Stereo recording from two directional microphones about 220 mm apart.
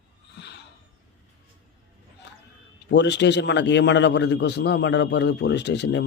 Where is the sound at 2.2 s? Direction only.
50° left (ahead or behind).